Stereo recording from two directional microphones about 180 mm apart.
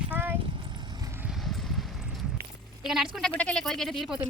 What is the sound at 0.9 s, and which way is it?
Clip-clop, 20° right (ahead or behind).